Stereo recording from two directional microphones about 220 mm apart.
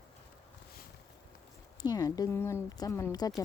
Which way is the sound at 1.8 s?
15° left (ahead or behind).